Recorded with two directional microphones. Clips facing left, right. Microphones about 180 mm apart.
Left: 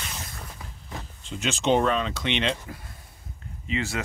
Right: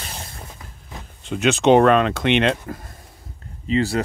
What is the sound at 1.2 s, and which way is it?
Speech, 60° right (ahead or behind).